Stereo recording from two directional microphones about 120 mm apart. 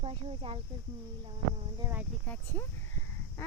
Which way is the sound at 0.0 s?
50° right (ahead or behind).